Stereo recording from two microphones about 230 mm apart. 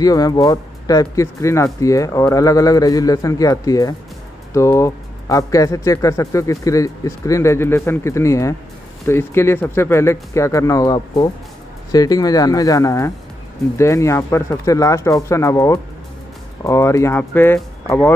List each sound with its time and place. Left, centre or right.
0.0 s speech: centre